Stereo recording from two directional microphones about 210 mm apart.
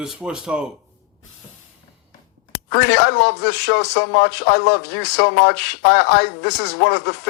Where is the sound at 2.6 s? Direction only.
50° left (ahead or behind).